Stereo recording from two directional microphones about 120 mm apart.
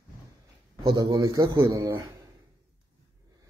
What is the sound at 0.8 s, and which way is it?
A man's voice, 35° right (ahead or behind).